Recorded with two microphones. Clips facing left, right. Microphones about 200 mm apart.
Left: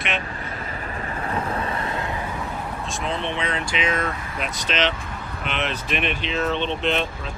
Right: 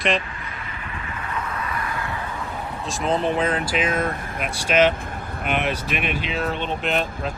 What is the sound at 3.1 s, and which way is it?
Speech, 40° right (ahead or behind).